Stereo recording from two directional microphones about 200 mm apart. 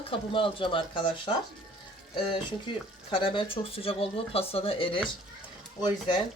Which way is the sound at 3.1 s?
25° left (ahead or behind).